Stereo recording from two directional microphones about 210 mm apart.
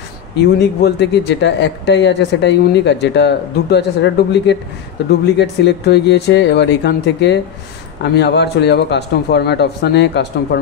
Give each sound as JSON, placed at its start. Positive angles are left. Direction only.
{"t": 0.4, "sound": "a man's voice", "side_deg": 55}